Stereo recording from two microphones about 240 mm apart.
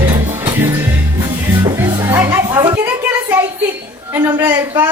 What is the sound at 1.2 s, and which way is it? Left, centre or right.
Music, centre.